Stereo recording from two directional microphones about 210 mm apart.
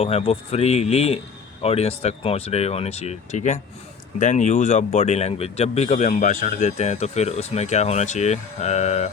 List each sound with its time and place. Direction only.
0.0 s speech: 30° left (ahead or behind)